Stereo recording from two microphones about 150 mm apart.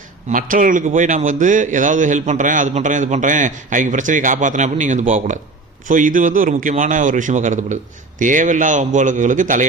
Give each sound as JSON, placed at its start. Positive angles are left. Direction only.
{"t": 0.3, "sound": "a man's voice", "side_deg": -65}